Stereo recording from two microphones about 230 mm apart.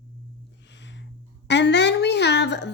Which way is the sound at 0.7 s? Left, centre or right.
Left.